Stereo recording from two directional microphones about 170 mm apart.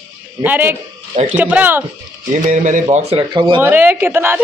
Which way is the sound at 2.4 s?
50° right (ahead or behind).